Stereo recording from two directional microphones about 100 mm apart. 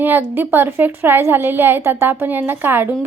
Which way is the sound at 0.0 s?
20° right (ahead or behind).